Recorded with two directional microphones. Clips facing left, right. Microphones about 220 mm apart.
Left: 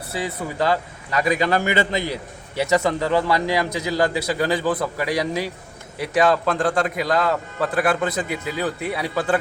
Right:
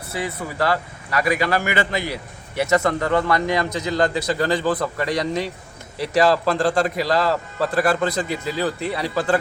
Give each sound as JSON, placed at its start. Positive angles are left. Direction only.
{"t": 0.1, "sound": "a man's voice", "side_deg": 15}